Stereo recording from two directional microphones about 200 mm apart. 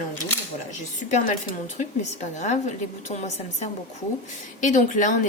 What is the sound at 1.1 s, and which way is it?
Speech, 40° left (ahead or behind).